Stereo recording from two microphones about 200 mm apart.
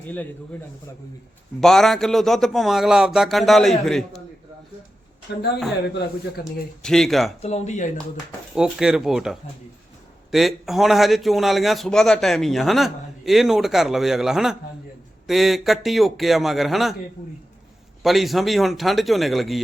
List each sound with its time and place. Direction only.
1.6 s a man's voice: centre (ahead or behind)
5.3 s a man's voice: 55° left (ahead or behind)
6.4 s a man's voice: centre (ahead or behind)
7.4 s speech: 35° left (ahead or behind)
8.5 s a man's voice: 5° right (ahead or behind)
18.0 s a man's voice: centre (ahead or behind)